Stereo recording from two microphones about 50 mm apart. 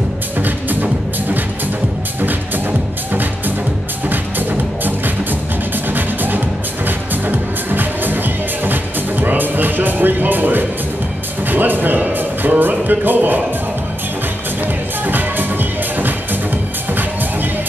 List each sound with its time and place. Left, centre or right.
2.1 s music: right
15.0 s music: right